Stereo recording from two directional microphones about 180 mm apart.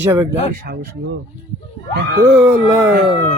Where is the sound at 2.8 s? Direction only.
55° right (ahead or behind).